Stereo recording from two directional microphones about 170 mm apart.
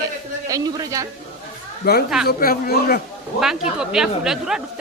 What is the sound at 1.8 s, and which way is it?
Speech, 65° left (ahead or behind).